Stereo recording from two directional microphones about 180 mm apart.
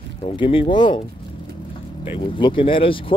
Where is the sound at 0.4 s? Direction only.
30° left (ahead or behind).